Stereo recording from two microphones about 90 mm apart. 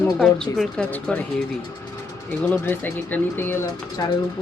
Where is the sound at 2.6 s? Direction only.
20° left (ahead or behind).